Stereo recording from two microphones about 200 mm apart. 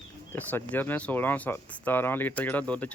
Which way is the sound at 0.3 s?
10° left (ahead or behind).